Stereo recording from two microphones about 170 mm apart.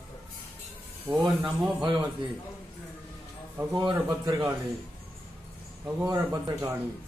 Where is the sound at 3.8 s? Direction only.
25° right (ahead or behind).